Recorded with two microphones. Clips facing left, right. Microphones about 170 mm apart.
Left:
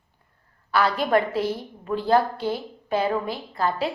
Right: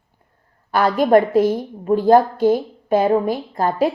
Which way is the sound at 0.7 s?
45° right (ahead or behind).